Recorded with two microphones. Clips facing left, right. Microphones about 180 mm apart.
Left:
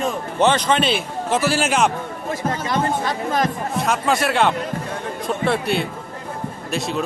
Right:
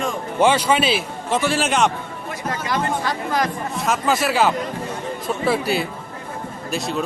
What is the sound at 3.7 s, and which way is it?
Speech, centre (ahead or behind).